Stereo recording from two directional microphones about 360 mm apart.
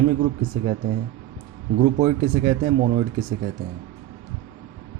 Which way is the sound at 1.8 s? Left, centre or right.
Centre.